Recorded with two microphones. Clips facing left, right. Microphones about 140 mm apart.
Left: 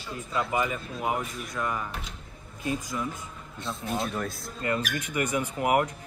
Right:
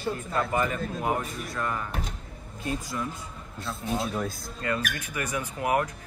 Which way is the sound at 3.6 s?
Centre (ahead or behind).